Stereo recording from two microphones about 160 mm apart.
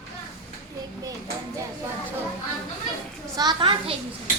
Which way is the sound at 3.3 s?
30° right (ahead or behind).